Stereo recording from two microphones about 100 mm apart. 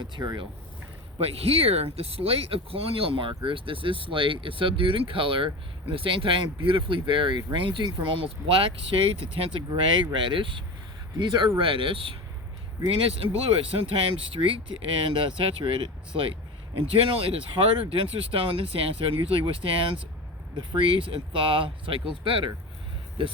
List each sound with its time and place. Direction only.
0.0 s speech: 40° right (ahead or behind)
1.2 s speech: 80° right
9.6 s speech: 55° right (ahead or behind)
13.2 s speech: 70° right (ahead or behind)